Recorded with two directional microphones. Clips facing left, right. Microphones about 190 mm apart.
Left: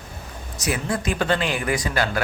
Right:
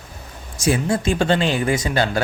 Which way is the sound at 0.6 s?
25° right (ahead or behind).